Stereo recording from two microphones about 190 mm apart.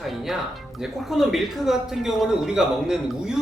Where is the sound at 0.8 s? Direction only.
Centre (ahead or behind).